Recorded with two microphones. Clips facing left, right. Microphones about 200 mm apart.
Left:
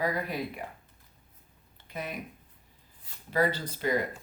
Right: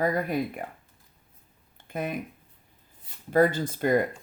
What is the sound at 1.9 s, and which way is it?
Speech, 50° right (ahead or behind).